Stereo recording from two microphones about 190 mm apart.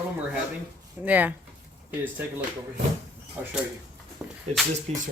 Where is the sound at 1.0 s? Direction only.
10° right (ahead or behind).